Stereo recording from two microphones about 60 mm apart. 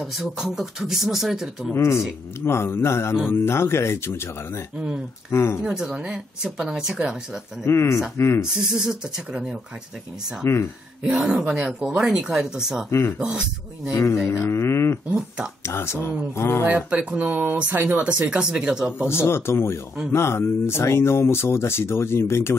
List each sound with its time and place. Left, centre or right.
0.0 s speech: centre
1.8 s speech: left
4.7 s speech: centre
5.3 s speech: left
5.6 s speech: centre
7.6 s speech: left
8.5 s speech: centre
10.4 s speech: left
11.2 s speech: centre
13.9 s speech: left
15.0 s speech: centre
15.6 s speech: left
16.6 s speech: right
19.0 s speech: left